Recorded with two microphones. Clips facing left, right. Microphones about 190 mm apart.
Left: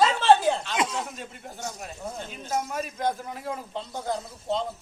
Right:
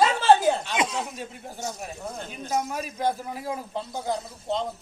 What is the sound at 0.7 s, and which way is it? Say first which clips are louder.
Speech: right 1 dB; 20° right (ahead or behind).